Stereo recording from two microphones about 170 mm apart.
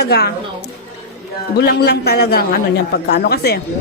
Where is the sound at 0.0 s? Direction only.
70° left (ahead or behind).